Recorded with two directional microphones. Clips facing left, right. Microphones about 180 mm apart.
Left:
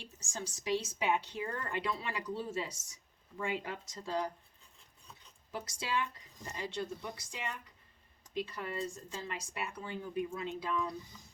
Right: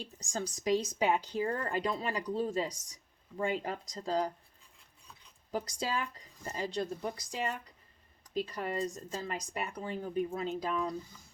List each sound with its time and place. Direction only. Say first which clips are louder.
0.6 s speech: right 4 dB; 40° right (ahead or behind)
5.5 s speech: right 4 dB; 35° right (ahead or behind)